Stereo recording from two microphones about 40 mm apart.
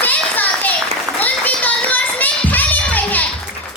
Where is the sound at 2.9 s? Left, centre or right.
Left.